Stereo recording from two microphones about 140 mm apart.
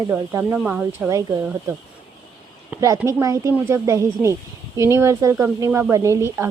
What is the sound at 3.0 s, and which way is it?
Speech, 20° right (ahead or behind).